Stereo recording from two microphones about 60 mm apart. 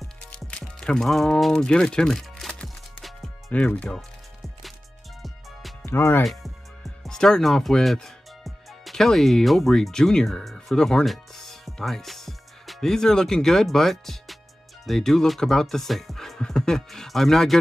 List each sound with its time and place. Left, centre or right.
0.3 s music: centre
0.7 s speech: centre
3.0 s music: centre
3.5 s speech: left
5.2 s music: centre
5.9 s speech: left
7.0 s speech: centre
10.5 s music: centre
14.9 s speech: centre